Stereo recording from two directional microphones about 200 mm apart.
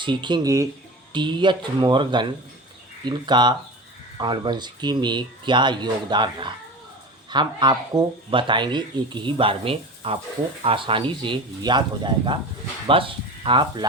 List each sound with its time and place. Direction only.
0.0 s speech: 25° right (ahead or behind)